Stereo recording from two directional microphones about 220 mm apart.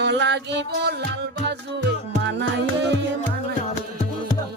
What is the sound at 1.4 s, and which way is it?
Music, 50° right (ahead or behind).